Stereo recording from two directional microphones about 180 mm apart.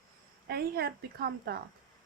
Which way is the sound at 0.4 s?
60° right (ahead or behind).